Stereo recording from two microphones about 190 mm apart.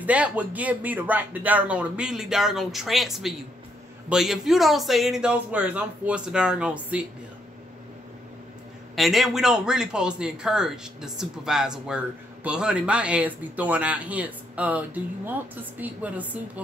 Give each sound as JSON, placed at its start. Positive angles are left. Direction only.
{"t": 0.0, "sound": "a man's voice", "side_deg": -5}
{"t": 8.9, "sound": "a man's voice", "side_deg": 0}
{"t": 15.8, "sound": "speech", "side_deg": -10}